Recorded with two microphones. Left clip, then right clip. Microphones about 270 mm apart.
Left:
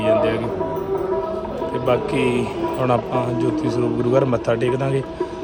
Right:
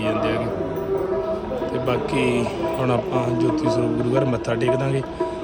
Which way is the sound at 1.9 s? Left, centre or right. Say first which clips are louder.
Left 3 dB; centre.